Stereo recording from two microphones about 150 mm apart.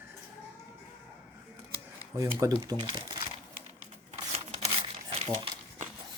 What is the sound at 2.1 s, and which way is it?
Speech, 20° right (ahead or behind).